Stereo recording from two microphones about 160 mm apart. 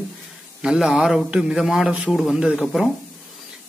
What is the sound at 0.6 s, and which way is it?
A man's voice, 5° right (ahead or behind).